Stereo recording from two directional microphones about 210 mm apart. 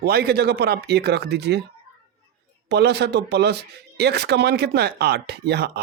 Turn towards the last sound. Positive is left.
turn(degrees=-50)  # may be behind; listen again after turning